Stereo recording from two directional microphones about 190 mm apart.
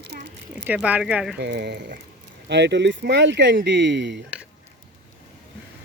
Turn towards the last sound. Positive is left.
turn(degrees=-70)  # may be behind; listen again after turning